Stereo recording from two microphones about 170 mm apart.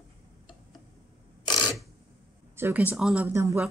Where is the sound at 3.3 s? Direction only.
15° right (ahead or behind).